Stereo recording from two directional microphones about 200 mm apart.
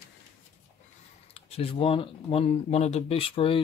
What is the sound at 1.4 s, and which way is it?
Speech, 30° left (ahead or behind).